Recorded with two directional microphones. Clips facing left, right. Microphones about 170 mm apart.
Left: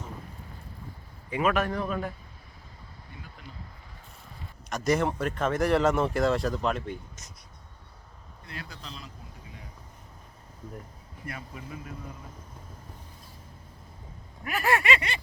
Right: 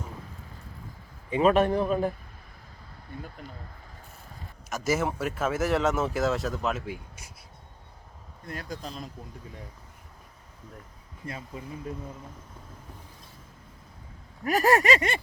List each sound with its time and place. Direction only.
1.3 s a man's voice: 30° right (ahead or behind)
4.7 s speech: 5° right (ahead or behind)
8.4 s speech: 45° right (ahead or behind)
11.3 s speech: 25° right (ahead or behind)
14.4 s a man's voice: 40° right (ahead or behind)